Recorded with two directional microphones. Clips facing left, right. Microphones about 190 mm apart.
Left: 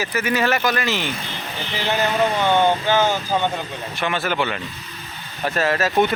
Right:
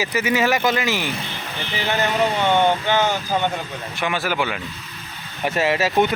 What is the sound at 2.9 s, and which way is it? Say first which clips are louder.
Speech: left 1 dB; 15° right (ahead or behind).